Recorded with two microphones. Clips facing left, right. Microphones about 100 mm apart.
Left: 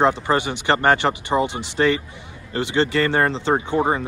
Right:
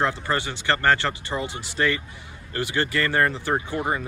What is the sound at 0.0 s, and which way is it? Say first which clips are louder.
Speech: left 6 dB; 20° left (ahead or behind).